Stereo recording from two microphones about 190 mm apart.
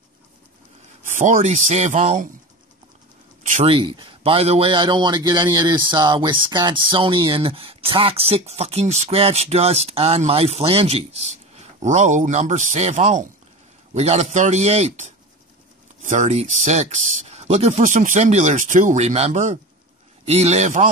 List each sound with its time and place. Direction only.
1.0 s a man's voice: 40° right (ahead or behind)
3.6 s a man's voice: 30° right (ahead or behind)